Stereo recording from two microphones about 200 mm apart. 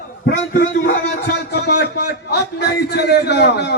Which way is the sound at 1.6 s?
55° left (ahead or behind).